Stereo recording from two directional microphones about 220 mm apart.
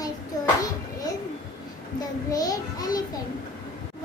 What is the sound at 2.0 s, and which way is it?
A child's voice, 15° left (ahead or behind).